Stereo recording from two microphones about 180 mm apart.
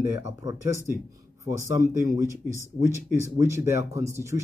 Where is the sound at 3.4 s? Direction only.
15° right (ahead or behind).